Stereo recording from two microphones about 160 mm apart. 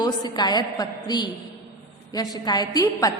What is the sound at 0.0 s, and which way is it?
A woman's voice, 25° left (ahead or behind).